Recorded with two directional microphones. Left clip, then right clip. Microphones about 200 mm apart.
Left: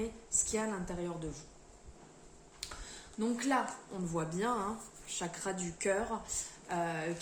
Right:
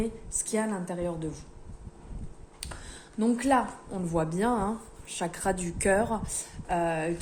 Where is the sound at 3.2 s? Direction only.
50° right (ahead or behind).